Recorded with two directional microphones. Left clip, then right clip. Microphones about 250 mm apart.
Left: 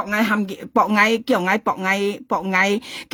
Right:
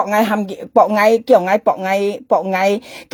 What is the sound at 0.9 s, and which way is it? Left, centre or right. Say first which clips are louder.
Speech: right 6 dB; left.